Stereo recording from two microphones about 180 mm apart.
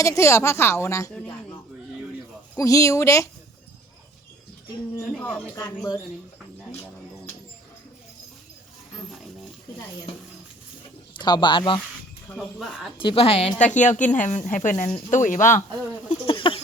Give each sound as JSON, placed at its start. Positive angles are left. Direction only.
{"t": 0.0, "sound": "a woman's voice", "side_deg": 15}
{"t": 2.6, "sound": "a woman's voice", "side_deg": 20}
{"t": 5.1, "sound": "a woman's voice", "side_deg": 5}
{"t": 5.5, "sound": "a woman's voice", "side_deg": 15}
{"t": 11.1, "sound": "speech", "side_deg": 25}
{"t": 12.4, "sound": "speech", "side_deg": 0}
{"t": 13.0, "sound": "a woman's voice", "side_deg": 30}
{"t": 16.2, "sound": "speech", "side_deg": 30}